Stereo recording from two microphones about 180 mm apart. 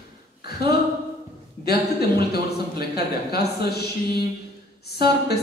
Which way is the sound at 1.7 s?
60° left (ahead or behind).